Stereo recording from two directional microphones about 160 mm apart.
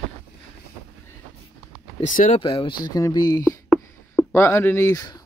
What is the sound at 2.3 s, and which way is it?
Speech, 35° left (ahead or behind).